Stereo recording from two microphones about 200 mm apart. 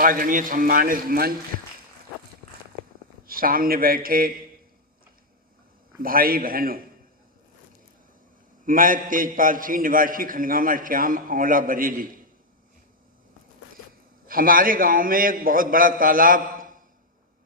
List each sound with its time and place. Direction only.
0.0 s a man's voice: 45° right (ahead or behind)
3.2 s a man's voice: 45° right (ahead or behind)
6.0 s a man's voice: 45° right (ahead or behind)
8.6 s a man's voice: 45° right (ahead or behind)
14.3 s a man's voice: 45° right (ahead or behind)